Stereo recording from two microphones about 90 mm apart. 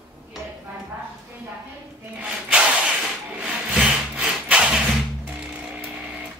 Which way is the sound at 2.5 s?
10° right (ahead or behind).